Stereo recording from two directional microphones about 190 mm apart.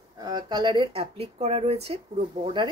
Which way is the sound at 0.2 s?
25° right (ahead or behind).